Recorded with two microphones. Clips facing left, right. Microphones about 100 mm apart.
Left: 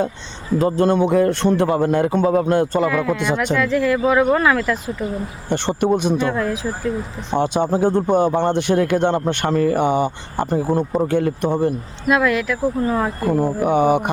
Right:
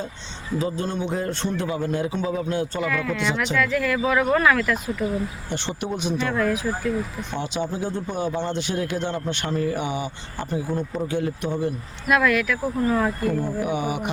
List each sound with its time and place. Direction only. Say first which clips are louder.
0.6 s speech: left 11 dB; 60° left (ahead or behind)
2.9 s speech: left 5 dB; 20° left (ahead or behind)
3.5 s speech: left 6 dB; 30° left (ahead or behind)
5.5 s speech: left 16 dB; 55° left (ahead or behind)
6.2 s speech: left 2 dB; 20° left (ahead or behind)
7.3 s speech: left 10 dB; 55° left (ahead or behind)
12.0 s speech: left 3 dB; 25° left (ahead or behind)
13.1 s speech: left 6 dB; 35° left (ahead or behind)